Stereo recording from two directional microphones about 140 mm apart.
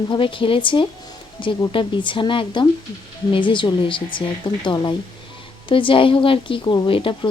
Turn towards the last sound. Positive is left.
turn(degrees=35)  # may be behind; listen again after turning